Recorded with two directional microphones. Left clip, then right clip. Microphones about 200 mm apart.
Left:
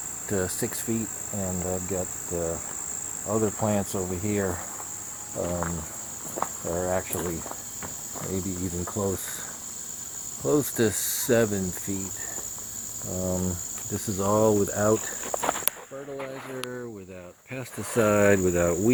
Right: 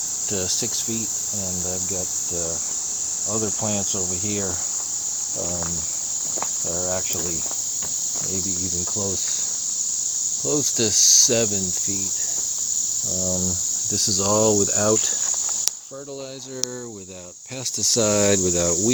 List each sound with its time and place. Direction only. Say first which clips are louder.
0.3 s cricket: right 2 dB; 15° right (ahead or behind)
3.3 s cricket: left 2 dB; 15° right (ahead or behind)
6.4 s speech: left 2 dB; 10° right (ahead or behind)
10.4 s cricket: even; 15° right (ahead or behind)
13.9 s speech: right 4 dB; 45° right (ahead or behind)
17.9 s cricket: even; 30° right (ahead or behind)